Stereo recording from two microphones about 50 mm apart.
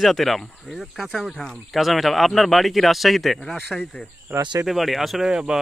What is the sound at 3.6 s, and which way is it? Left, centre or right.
Speech, centre.